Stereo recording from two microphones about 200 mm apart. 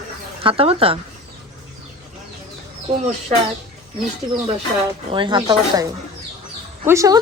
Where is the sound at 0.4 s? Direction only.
25° right (ahead or behind).